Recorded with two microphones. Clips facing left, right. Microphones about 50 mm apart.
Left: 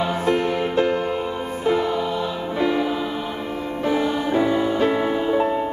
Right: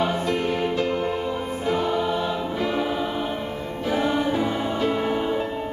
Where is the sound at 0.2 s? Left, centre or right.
Left.